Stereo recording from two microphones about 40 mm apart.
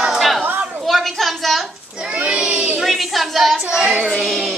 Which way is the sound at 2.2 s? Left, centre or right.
Right.